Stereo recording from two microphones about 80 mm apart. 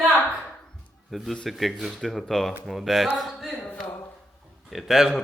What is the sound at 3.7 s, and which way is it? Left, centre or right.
Speech, left.